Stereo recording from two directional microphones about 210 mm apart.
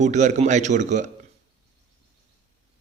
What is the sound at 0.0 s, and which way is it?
A man's voice, 35° right (ahead or behind).